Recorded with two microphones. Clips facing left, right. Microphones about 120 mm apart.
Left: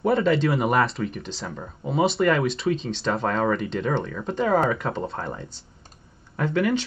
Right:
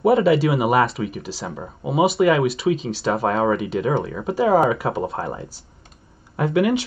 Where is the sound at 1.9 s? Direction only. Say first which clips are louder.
Right 4 dB; 5° right (ahead or behind).